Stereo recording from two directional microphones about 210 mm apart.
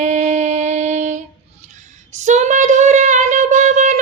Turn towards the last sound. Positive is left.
turn(degrees=-35)  # may be behind; listen again after turning